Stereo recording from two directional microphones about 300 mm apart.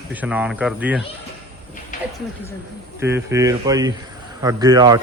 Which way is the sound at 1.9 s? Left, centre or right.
Left.